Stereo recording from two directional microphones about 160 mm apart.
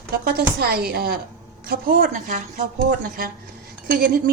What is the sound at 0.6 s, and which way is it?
A woman's voice, 75° right (ahead or behind).